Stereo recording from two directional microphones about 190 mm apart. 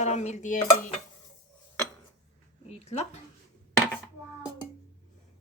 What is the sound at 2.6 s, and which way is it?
Speech, 35° left (ahead or behind).